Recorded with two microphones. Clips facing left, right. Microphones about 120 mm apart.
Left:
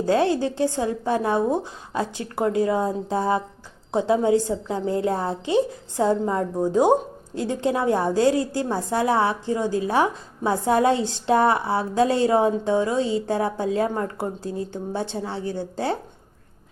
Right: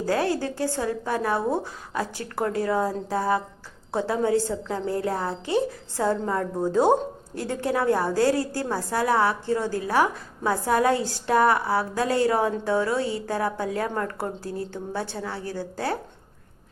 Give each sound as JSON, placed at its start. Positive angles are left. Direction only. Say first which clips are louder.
{"t": 0.0, "sound": "a woman's voice", "louder": "left 4 dB", "side_deg": 20}